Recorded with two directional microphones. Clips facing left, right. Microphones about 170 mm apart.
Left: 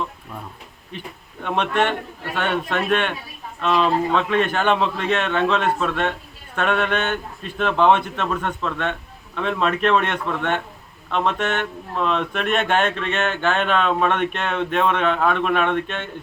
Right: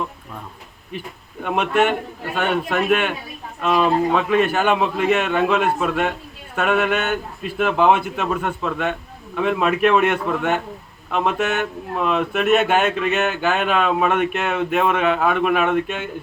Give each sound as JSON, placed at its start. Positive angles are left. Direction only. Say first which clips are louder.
{"t": 0.9, "sound": "speech", "louder": "right 3 dB", "side_deg": -5}